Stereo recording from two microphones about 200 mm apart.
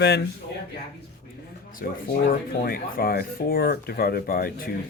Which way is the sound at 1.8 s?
50° left (ahead or behind).